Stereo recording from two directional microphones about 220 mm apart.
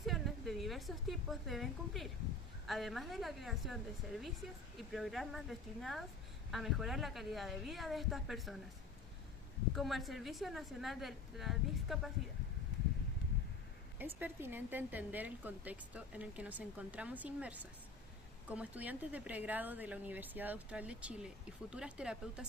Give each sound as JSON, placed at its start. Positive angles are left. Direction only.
{"t": 0.0, "sound": "a woman's voice", "side_deg": 0}
{"t": 9.7, "sound": "a woman's voice", "side_deg": 0}
{"t": 14.0, "sound": "a woman's voice", "side_deg": -10}